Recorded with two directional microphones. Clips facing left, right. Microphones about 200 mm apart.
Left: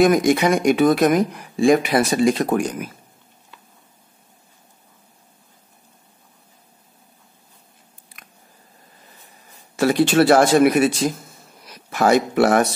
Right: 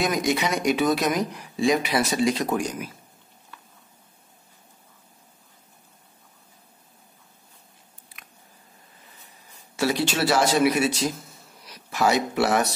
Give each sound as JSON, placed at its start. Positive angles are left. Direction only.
{"t": 0.0, "sound": "speech", "side_deg": 50}
{"t": 9.8, "sound": "speech", "side_deg": 55}